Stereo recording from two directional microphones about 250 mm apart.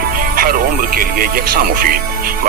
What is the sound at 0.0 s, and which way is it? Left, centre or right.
Speech, right.